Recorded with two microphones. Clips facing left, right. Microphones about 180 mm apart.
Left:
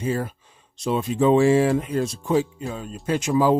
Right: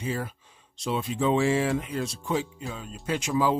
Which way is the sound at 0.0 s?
45° left (ahead or behind).